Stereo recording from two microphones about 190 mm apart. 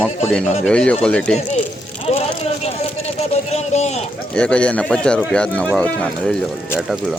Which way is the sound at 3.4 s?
35° left (ahead or behind).